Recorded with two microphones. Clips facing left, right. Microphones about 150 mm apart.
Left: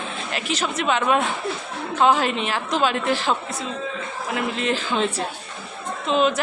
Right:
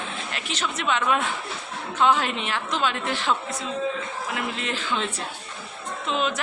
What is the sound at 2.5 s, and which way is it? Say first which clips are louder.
Speech: left 3 dB; 35° left (ahead or behind).